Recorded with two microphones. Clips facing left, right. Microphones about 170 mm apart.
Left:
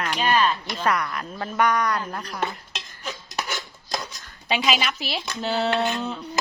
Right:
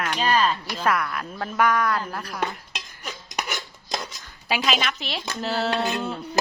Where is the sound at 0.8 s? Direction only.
Centre (ahead or behind).